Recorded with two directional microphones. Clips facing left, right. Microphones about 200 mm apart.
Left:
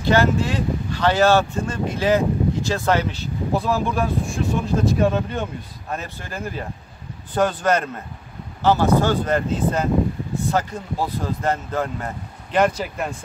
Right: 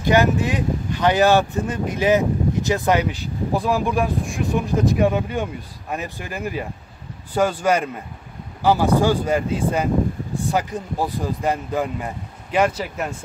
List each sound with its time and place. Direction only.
0.0 s speech: 15° right (ahead or behind)